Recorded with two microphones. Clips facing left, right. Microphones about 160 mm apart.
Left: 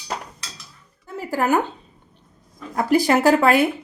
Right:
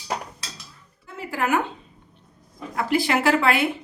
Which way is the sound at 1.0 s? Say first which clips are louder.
Left 4 dB; 40° left (ahead or behind).